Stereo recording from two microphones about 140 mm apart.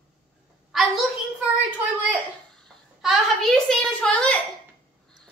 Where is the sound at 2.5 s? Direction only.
Centre (ahead or behind).